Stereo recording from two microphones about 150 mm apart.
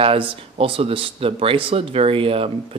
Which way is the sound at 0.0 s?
40° right (ahead or behind).